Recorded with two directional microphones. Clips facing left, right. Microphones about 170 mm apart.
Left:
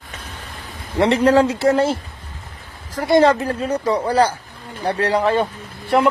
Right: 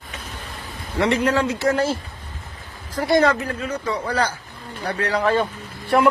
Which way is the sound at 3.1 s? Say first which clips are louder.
Left 4 dB; 25° left (ahead or behind).